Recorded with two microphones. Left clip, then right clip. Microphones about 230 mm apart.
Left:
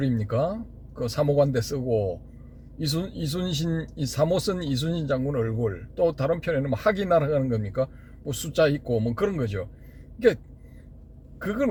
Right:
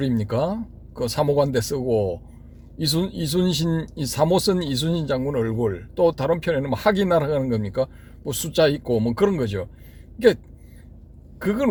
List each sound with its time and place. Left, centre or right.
0.0 s speech: right
11.4 s speech: right